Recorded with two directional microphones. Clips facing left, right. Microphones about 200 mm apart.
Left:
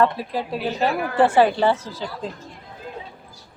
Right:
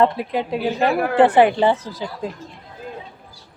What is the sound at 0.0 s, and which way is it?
A woman's voice, 20° right (ahead or behind).